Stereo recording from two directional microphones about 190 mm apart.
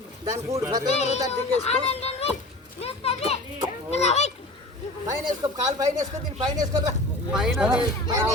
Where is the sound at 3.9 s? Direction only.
35° left (ahead or behind).